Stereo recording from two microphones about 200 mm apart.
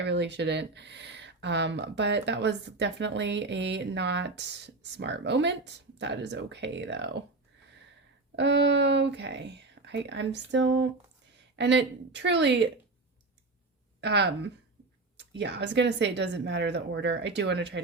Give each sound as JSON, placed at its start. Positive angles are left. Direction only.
{"t": 0.0, "sound": "speech", "side_deg": -60}
{"t": 8.4, "sound": "speech", "side_deg": -60}
{"t": 14.0, "sound": "speech", "side_deg": -60}